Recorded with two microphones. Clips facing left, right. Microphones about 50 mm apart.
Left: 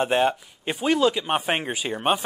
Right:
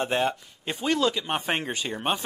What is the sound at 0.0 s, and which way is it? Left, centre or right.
Speech, centre.